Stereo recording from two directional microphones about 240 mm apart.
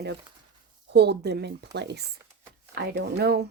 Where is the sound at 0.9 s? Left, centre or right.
Right.